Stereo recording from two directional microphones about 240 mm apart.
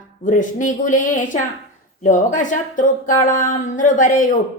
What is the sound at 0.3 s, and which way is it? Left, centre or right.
A woman's voice, left.